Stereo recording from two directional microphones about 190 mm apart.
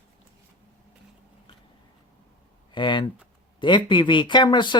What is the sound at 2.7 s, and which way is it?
Speech, 25° left (ahead or behind).